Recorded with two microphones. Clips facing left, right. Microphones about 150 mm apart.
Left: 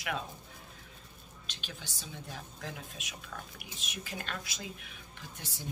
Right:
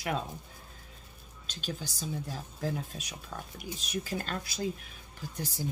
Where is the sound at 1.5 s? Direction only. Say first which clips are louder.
Right 9 dB; 40° right (ahead or behind).